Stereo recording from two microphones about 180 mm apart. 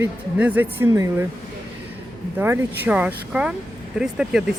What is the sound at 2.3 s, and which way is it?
Speech, 10° right (ahead or behind).